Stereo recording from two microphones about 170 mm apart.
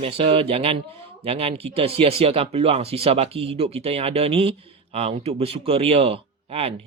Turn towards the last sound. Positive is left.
turn(degrees=-35)  # may be behind; listen again after turning